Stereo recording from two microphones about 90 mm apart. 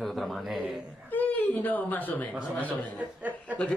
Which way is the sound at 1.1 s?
20° left (ahead or behind).